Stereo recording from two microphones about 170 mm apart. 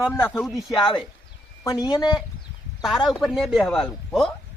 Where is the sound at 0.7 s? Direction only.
25° left (ahead or behind).